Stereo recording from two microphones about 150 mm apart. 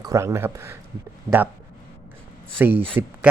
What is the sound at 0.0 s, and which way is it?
Speech, 20° right (ahead or behind).